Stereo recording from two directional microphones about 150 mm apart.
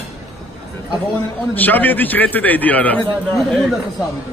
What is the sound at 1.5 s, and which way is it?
A man's voice, 10° left (ahead or behind).